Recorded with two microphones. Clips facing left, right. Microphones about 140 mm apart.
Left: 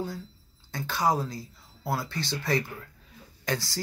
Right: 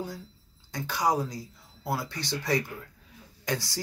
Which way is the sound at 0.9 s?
20° right (ahead or behind).